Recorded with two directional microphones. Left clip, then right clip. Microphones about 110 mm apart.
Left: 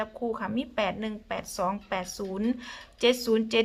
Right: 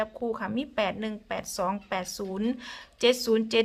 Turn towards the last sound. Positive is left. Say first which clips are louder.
# right 1 dB
turn(degrees=-25)  # may be behind; listen again after turning